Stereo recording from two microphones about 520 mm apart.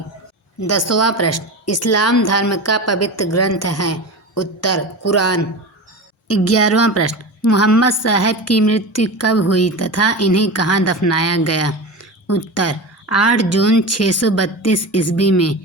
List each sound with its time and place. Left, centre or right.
0.6 s a woman's voice: left